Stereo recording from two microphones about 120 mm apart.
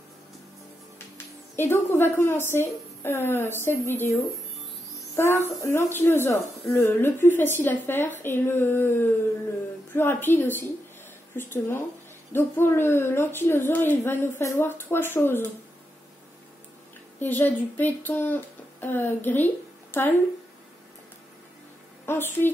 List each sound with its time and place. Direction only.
0.9 s speech: 20° left (ahead or behind)
5.1 s music: 20° left (ahead or behind)
5.6 s a woman's voice: 20° left (ahead or behind)
17.2 s speech: 15° left (ahead or behind)
22.0 s a woman's voice: 20° left (ahead or behind)